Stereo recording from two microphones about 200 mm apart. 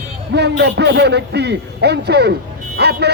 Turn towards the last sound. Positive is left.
turn(degrees=-55)  # may be behind; listen again after turning